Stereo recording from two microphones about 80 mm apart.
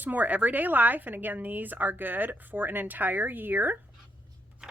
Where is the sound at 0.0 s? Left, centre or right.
Right.